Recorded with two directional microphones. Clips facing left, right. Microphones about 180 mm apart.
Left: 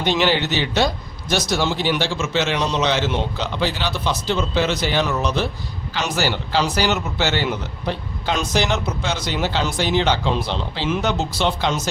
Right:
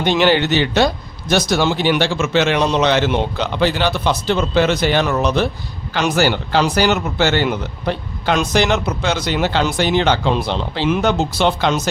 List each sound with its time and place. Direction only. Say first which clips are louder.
0.0 s speech: right 4 dB; 55° right (ahead or behind)